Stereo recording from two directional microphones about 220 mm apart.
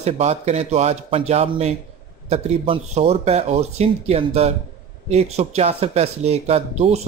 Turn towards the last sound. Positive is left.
turn(degrees=-30)  # may be behind; listen again after turning